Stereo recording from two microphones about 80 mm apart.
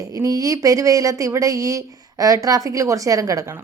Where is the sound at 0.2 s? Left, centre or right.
Right.